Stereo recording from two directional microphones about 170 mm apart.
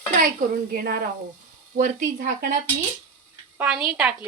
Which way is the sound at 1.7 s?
50° right (ahead or behind).